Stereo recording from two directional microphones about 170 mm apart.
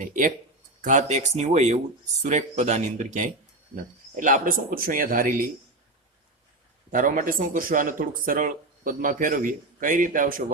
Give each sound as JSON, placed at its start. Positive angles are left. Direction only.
{"t": 0.0, "sound": "speech", "side_deg": -50}
{"t": 6.9, "sound": "speech", "side_deg": -50}